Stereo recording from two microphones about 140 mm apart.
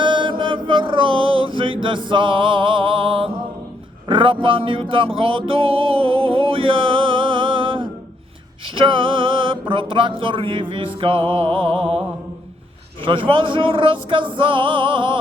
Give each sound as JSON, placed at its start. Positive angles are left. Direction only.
{"t": 0.0, "sound": "mantra", "side_deg": -35}
{"t": 4.1, "sound": "music", "side_deg": -35}
{"t": 8.6, "sound": "speech", "side_deg": -40}